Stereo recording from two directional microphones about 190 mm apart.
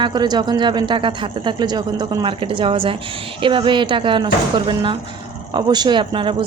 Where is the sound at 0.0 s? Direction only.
20° right (ahead or behind).